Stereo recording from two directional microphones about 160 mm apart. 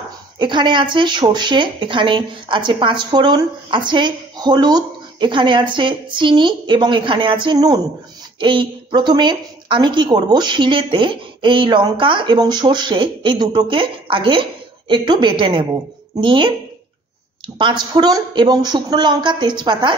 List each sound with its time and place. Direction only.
0.4 s a woman's voice: 30° right (ahead or behind)
17.6 s a woman's voice: 30° right (ahead or behind)